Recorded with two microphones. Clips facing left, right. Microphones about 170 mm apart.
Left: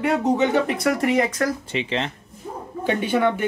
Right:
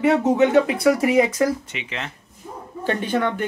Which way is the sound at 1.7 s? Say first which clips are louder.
Left 7 dB; 30° left (ahead or behind).